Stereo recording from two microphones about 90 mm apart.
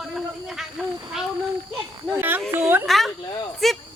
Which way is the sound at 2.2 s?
20° right (ahead or behind).